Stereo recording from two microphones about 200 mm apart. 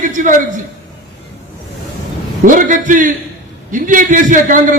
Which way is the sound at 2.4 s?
40° right (ahead or behind).